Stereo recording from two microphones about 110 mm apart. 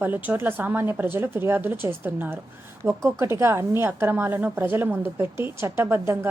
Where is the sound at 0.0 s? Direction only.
15° right (ahead or behind).